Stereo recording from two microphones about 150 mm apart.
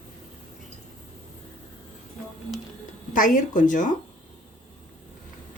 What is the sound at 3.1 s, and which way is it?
Speech, 60° left (ahead or behind).